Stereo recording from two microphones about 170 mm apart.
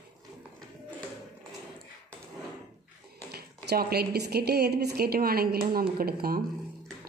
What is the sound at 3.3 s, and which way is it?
A woman's voice, 70° right (ahead or behind).